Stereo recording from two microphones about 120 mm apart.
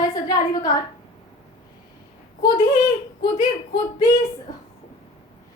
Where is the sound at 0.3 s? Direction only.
30° left (ahead or behind).